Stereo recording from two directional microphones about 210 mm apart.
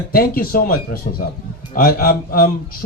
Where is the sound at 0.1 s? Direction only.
45° left (ahead or behind).